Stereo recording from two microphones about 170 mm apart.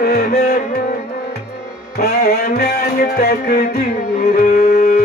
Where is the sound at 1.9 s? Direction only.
65° left (ahead or behind).